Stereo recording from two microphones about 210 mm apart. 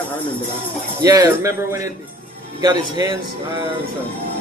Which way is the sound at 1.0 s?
15° right (ahead or behind).